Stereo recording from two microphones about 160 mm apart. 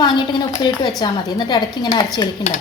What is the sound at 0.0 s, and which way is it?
A woman's voice, 30° left (ahead or behind).